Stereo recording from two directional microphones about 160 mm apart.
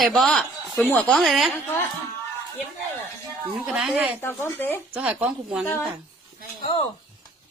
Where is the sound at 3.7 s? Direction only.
5° right (ahead or behind).